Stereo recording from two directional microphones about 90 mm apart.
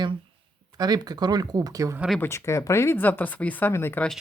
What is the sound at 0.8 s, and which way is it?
Speech, 50° right (ahead or behind).